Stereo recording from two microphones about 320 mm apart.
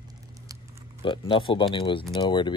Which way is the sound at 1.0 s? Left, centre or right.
Centre.